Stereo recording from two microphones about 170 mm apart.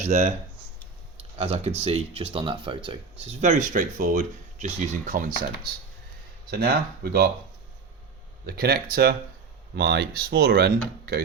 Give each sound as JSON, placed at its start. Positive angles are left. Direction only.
{"t": 0.1, "sound": "speech", "side_deg": -40}
{"t": 6.5, "sound": "speech", "side_deg": -65}
{"t": 8.4, "sound": "speech", "side_deg": -65}